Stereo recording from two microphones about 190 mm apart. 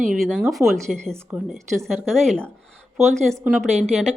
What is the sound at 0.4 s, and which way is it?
A woman's voice, centre (ahead or behind).